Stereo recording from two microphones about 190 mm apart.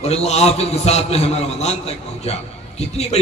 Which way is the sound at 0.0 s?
35° left (ahead or behind).